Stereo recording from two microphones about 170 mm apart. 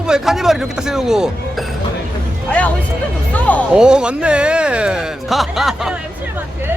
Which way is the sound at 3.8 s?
5° right (ahead or behind).